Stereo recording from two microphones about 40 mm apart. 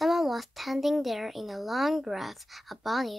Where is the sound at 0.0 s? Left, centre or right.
Centre.